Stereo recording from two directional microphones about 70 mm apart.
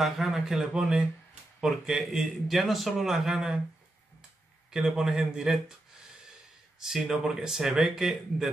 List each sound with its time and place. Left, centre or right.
0.0 s speech: centre
4.6 s speech: centre
6.8 s speech: centre